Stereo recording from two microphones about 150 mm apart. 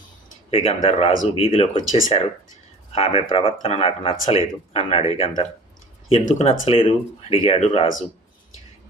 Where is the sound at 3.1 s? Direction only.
35° left (ahead or behind).